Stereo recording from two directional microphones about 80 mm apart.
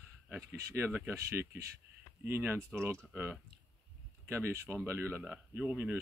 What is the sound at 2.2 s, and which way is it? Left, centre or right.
Speech, right.